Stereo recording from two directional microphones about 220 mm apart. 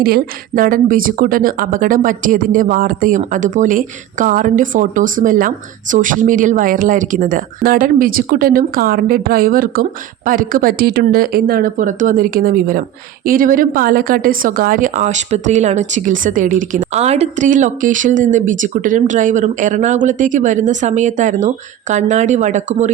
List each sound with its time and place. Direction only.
0.0 s speech: 40° right (ahead or behind)